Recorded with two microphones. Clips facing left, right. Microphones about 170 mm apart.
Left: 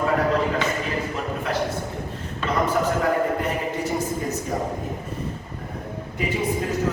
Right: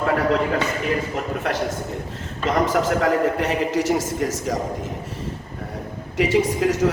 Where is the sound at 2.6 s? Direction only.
90° right.